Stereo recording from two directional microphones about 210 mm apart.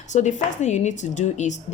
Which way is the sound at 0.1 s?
35° left (ahead or behind).